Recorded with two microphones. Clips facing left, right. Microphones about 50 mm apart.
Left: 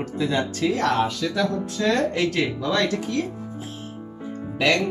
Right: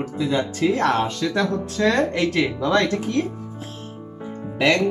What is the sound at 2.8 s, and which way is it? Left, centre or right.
Speech, right.